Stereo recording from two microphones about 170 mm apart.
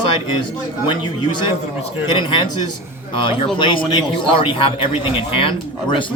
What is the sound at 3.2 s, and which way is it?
A man's voice, 30° left (ahead or behind).